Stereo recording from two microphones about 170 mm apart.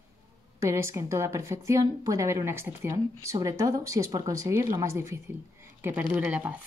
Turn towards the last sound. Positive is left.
turn(degrees=-10)  # may be behind; listen again after turning